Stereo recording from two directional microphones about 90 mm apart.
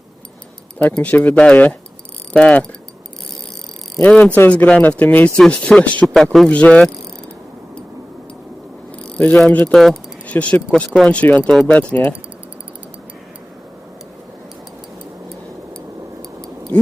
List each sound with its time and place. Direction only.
0.8 s speech: 15° left (ahead or behind)
4.0 s speech: 15° left (ahead or behind)
9.1 s speech: 15° left (ahead or behind)
9.7 s speech: centre (ahead or behind)
10.2 s speech: 15° left (ahead or behind)